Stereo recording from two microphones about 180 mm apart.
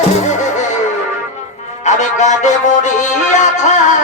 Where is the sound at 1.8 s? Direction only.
40° left (ahead or behind).